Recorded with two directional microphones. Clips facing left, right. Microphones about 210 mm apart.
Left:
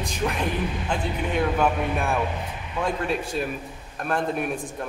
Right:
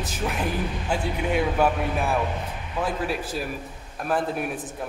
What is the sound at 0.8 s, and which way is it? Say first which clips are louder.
A man's voice: right 1 dB; 10° right (ahead or behind).